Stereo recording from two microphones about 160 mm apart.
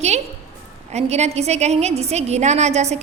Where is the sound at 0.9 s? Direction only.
45° right (ahead or behind).